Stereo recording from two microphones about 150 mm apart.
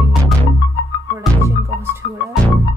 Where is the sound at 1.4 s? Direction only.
20° right (ahead or behind).